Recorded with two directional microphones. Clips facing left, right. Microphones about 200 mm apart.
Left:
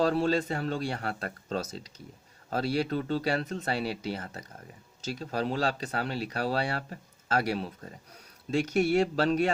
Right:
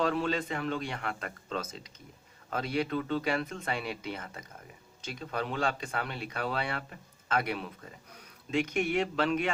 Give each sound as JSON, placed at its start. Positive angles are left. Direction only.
{"t": 0.0, "sound": "speech", "side_deg": 35}